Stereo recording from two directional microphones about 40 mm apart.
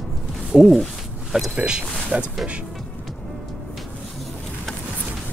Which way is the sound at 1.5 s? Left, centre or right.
Right.